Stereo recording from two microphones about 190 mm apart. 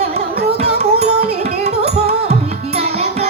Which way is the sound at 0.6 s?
35° right (ahead or behind).